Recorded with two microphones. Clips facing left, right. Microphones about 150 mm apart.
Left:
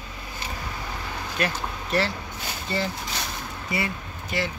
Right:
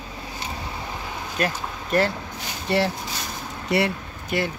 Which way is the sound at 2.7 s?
70° right (ahead or behind).